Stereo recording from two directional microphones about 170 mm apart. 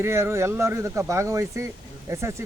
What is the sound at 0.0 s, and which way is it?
A man's voice, 15° right (ahead or behind).